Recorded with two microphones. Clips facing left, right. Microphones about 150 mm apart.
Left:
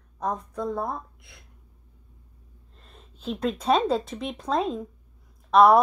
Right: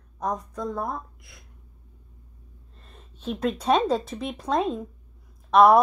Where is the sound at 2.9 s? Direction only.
5° right (ahead or behind).